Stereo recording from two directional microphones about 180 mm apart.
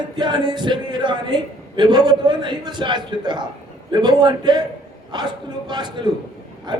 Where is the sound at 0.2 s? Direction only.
25° right (ahead or behind).